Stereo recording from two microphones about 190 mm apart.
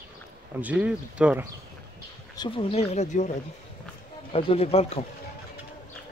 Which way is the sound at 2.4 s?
30° left (ahead or behind).